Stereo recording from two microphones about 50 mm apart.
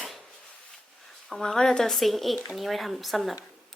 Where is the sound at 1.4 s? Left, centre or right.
Centre.